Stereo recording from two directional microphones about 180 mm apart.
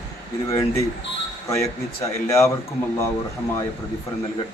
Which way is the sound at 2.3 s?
15° left (ahead or behind).